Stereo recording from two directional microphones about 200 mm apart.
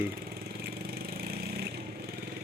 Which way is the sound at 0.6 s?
50° right (ahead or behind).